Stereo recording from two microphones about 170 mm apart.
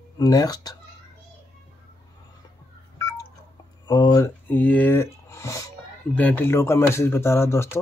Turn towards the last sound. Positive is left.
turn(degrees=15)  # may be behind; listen again after turning